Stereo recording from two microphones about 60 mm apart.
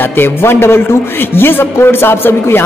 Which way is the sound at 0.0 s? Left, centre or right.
Left.